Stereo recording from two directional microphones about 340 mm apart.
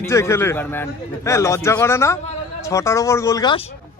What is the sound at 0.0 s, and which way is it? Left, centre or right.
A man's voice, centre.